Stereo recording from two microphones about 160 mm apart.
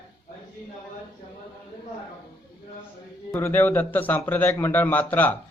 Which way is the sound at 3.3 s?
15° left (ahead or behind).